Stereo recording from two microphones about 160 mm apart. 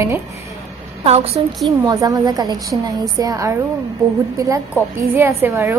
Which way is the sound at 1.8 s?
25° right (ahead or behind).